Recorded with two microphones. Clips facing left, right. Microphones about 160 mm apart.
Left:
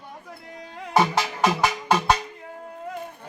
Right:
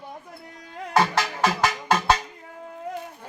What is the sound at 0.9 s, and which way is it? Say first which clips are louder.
Music: left 1 dB; 15° left (ahead or behind).